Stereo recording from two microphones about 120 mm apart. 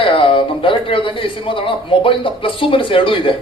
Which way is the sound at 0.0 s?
50° left (ahead or behind).